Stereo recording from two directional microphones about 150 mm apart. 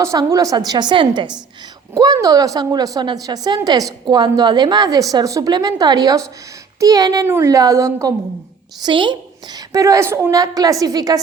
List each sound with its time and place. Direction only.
0.0 s a woman's voice: 20° right (ahead or behind)
9.7 s a woman's voice: 20° right (ahead or behind)